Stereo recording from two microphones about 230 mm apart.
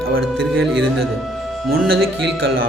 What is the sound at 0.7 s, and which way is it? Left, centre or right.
Speech, right.